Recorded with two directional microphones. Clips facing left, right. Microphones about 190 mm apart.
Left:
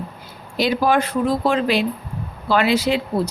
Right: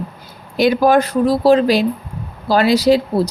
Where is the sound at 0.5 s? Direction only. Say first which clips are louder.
Right 5 dB; 45° right (ahead or behind).